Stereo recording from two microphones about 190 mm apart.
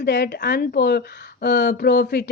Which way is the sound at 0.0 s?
55° left (ahead or behind).